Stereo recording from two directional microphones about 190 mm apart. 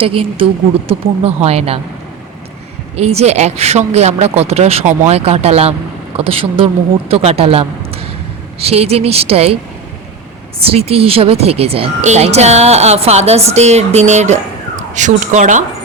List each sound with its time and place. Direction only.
0.0 s speech: 30° right (ahead or behind)
2.9 s speech: 35° right (ahead or behind)
10.6 s speech: 30° right (ahead or behind)